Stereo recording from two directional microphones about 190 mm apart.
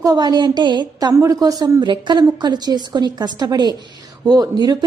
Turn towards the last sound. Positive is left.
turn(degrees=-20)  # may be behind; listen again after turning